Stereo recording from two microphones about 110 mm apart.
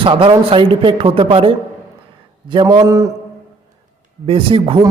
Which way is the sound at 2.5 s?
45° right (ahead or behind).